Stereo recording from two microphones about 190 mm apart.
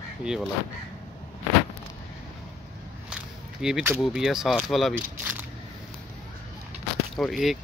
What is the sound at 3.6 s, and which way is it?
Speech, 5° right (ahead or behind).